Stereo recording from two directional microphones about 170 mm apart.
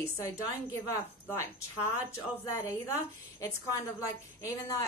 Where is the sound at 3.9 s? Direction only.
20° left (ahead or behind).